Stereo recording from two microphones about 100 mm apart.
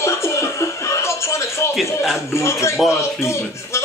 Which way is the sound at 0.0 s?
30° left (ahead or behind).